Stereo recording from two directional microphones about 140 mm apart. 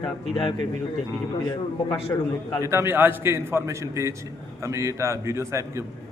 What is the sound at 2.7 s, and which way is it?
A man's voice, 15° right (ahead or behind).